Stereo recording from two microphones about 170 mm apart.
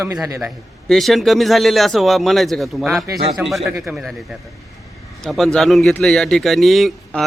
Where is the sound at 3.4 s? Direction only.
Centre (ahead or behind).